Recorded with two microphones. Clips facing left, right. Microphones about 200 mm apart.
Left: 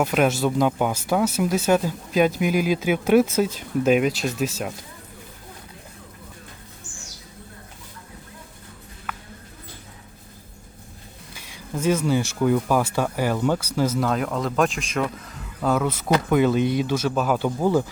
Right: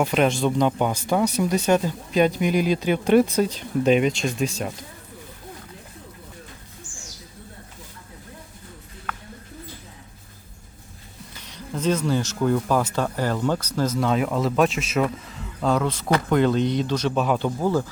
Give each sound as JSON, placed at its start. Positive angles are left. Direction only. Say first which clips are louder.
{"t": 0.0, "sound": "speech", "louder": "even", "side_deg": 5}
{"t": 11.3, "sound": "speech", "louder": "left 1 dB", "side_deg": 10}